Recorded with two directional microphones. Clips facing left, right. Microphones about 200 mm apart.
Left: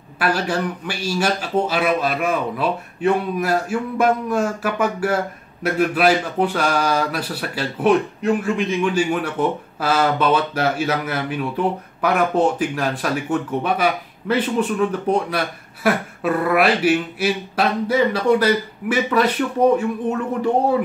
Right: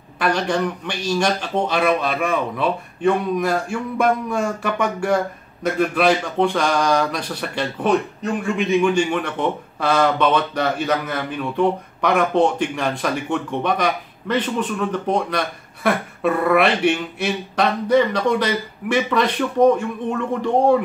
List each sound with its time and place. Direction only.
0.2 s speech: 5° left (ahead or behind)